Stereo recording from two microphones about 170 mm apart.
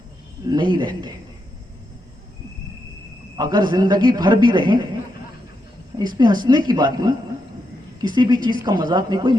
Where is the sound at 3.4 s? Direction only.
20° right (ahead or behind).